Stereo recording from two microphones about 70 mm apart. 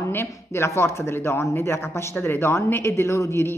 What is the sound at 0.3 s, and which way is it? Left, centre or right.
Speech, left.